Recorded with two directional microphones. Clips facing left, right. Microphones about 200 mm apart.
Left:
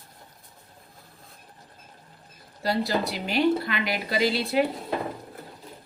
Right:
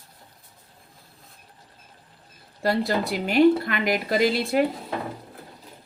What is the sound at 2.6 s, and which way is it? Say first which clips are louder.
A woman's voice: right 2 dB; 50° right (ahead or behind).